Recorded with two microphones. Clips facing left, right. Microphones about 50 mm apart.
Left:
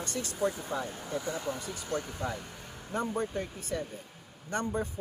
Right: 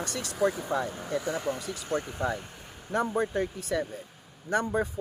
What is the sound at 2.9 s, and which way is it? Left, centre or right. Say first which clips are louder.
Speech: right 5 dB; right.